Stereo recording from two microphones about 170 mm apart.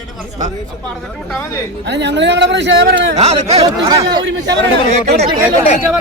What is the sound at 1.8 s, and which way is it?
Speech, 90° right.